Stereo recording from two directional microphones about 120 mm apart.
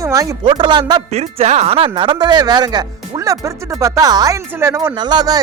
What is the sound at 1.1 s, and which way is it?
Speech, 65° right (ahead or behind).